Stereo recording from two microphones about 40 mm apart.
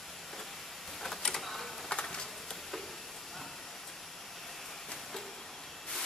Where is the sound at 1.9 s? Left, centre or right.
Left.